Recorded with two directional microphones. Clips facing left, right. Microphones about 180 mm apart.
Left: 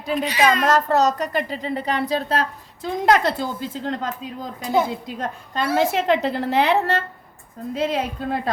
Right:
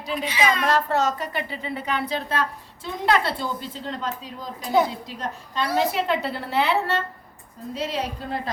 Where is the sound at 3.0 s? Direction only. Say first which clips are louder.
Left 4 dB; 45° left (ahead or behind).